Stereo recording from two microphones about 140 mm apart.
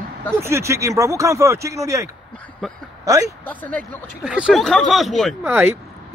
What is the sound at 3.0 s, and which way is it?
Speech, 25° right (ahead or behind).